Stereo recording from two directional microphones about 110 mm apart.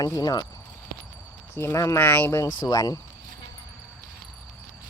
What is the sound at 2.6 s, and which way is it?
Speech, 35° left (ahead or behind).